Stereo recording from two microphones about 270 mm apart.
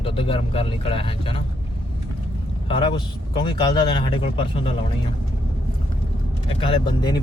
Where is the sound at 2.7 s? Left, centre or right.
Centre.